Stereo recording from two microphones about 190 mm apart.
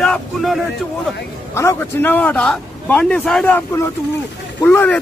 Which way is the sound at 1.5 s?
10° left (ahead or behind).